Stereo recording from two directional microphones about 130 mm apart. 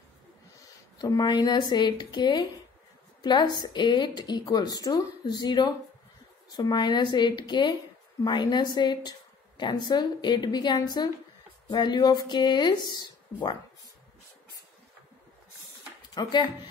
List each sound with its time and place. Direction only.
0.9 s a woman's voice: 30° left (ahead or behind)
16.2 s speech: 35° left (ahead or behind)